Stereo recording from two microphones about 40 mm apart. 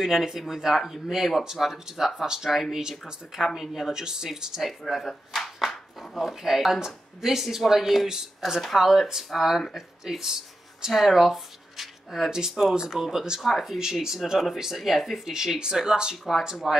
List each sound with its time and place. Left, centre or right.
0.0 s speech: centre
2.5 s speech: centre
3.9 s speech: centre
4.6 s speech: centre
8.5 s speech: centre
8.8 s speech: centre
10.9 s speech: centre
12.3 s speech: centre